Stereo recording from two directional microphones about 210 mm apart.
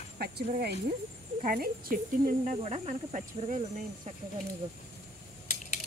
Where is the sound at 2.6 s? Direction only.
30° right (ahead or behind).